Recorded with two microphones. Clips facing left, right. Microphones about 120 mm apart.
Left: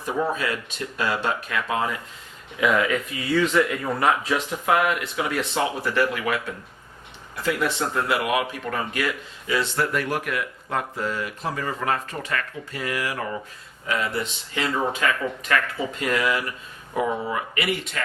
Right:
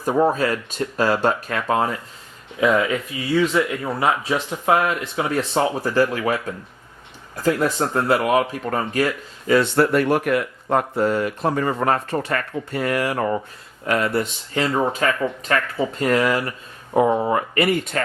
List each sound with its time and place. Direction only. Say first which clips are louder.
0.0 s speech: right 7 dB; 40° right (ahead or behind)
2.6 s speech: right 3 dB; 30° right (ahead or behind)
3.3 s speech: right 2 dB; 5° right (ahead or behind)
4.4 s speech: right 3 dB; 30° right (ahead or behind)
13.8 s speech: right 5 dB; 55° right (ahead or behind)